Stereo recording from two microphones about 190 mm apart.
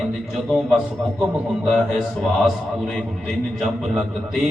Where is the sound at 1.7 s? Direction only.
Centre (ahead or behind).